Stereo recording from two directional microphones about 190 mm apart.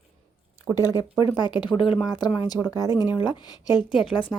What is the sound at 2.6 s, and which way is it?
Speech, centre (ahead or behind).